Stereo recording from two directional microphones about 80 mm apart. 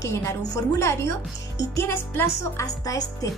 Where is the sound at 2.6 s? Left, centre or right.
Left.